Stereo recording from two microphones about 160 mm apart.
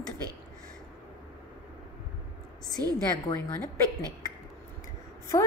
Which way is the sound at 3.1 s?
25° left (ahead or behind).